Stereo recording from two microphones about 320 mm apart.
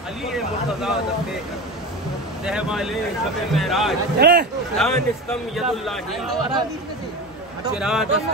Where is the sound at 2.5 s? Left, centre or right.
Centre.